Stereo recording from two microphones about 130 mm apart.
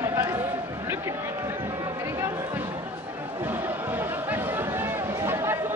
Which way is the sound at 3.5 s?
15° right (ahead or behind).